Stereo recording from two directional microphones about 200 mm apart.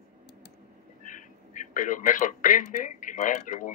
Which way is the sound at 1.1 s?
40° left (ahead or behind).